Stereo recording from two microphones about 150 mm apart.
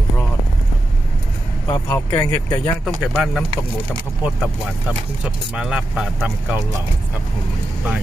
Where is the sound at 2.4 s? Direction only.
25° left (ahead or behind).